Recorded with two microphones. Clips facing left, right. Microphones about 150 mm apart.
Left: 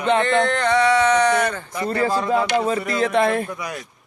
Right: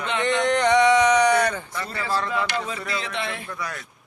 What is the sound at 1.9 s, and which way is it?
A man's voice, 45° left (ahead or behind).